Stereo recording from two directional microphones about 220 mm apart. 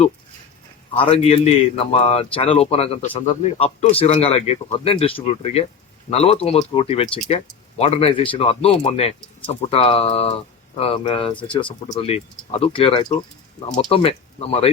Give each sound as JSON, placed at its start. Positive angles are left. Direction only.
{"t": 0.9, "sound": "a man's voice", "side_deg": 25}